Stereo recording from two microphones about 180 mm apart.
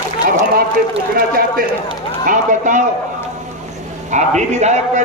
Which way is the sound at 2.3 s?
45° right (ahead or behind).